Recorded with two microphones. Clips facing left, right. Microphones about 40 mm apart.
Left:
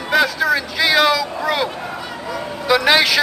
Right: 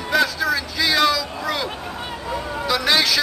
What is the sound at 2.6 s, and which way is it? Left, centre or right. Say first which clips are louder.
Speech: left 5 dB; left.